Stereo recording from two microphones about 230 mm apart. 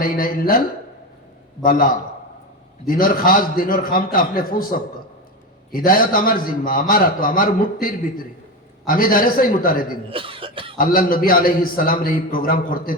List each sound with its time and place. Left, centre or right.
0.0 s a man's voice: left
1.6 s a man's voice: left
10.1 s cough: right
10.8 s a man's voice: left